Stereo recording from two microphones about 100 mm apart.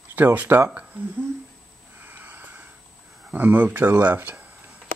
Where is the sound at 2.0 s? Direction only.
20° right (ahead or behind).